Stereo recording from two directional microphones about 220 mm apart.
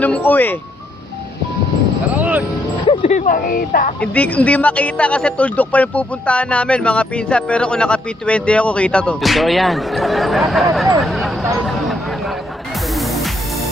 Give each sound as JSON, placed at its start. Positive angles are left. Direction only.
{"t": 0.0, "sound": "speech", "side_deg": 5}
{"t": 2.1, "sound": "a sound", "side_deg": -5}
{"t": 2.9, "sound": "speech", "side_deg": 35}
{"t": 4.0, "sound": "speech", "side_deg": 5}
{"t": 11.5, "sound": "a sound", "side_deg": 0}
{"t": 12.9, "sound": "music", "side_deg": 0}